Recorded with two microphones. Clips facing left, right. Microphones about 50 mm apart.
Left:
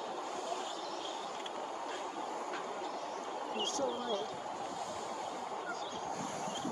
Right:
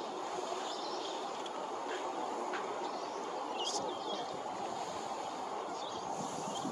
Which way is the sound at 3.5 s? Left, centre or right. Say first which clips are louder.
Left 5 dB; left.